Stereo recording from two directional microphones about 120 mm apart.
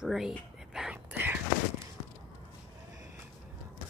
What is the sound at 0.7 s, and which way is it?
Whispering, 10° right (ahead or behind).